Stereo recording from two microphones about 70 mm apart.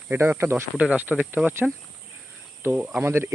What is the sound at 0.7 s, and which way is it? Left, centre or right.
Speech, centre.